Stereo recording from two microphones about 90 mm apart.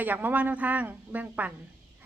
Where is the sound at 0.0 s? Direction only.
20° right (ahead or behind).